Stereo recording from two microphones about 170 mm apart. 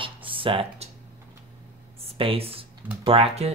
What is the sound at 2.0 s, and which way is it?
Speech, 35° right (ahead or behind).